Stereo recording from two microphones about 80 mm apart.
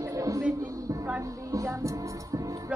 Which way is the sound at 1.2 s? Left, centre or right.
Right.